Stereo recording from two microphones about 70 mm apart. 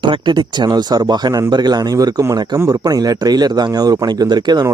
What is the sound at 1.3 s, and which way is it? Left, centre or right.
Speech, right.